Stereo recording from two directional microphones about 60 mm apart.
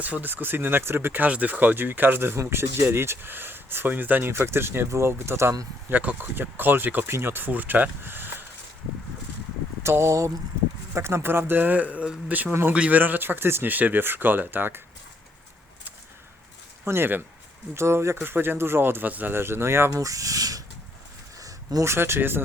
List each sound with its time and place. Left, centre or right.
0.0 s speech: right
4.3 s speech: right
5.9 s speech: right
6.1 s speech: right
9.8 s speech: right
16.8 s speech: right
17.7 s speech: right
18.2 s speech: right
20.0 s speech: right
21.3 s a sound: right
21.8 s speech: right